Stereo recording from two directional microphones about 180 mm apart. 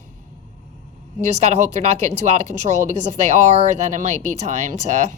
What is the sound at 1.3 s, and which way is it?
Speech, 40° right (ahead or behind).